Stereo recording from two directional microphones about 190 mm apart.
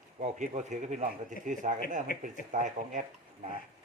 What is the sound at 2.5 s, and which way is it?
Speech, 40° right (ahead or behind).